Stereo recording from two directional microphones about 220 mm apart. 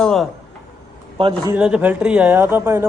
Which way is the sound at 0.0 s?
Centre (ahead or behind).